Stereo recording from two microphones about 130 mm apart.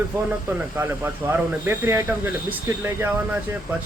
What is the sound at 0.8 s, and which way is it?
Speech, 15° right (ahead or behind).